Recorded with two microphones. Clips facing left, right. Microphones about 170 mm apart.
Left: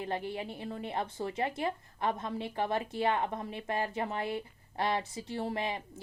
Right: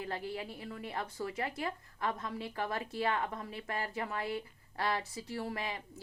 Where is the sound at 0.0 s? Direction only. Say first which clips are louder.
Left 3 dB; 20° left (ahead or behind).